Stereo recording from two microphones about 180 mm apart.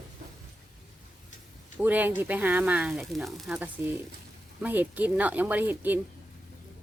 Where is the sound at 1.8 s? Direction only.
10° right (ahead or behind).